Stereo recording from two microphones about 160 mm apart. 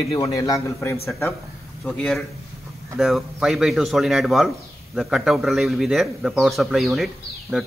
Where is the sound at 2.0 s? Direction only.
5° left (ahead or behind).